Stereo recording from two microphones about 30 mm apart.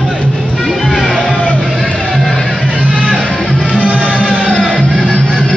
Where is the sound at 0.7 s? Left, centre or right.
Centre.